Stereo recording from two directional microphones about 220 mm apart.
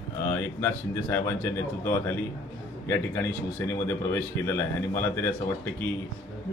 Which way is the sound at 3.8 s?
10° left (ahead or behind).